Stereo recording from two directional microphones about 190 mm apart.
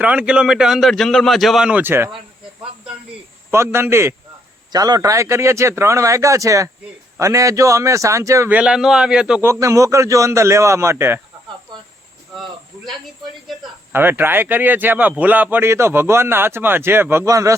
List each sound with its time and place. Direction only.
0.0 s a man's voice: 5° right (ahead or behind)
3.5 s a man's voice: 15° right (ahead or behind)
12.4 s speech: centre (ahead or behind)
13.9 s a man's voice: 10° right (ahead or behind)